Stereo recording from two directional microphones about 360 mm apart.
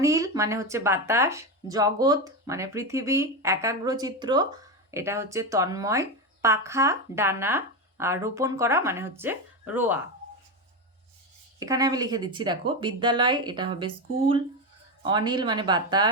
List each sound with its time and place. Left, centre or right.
0.0 s speech: centre
11.6 s speech: centre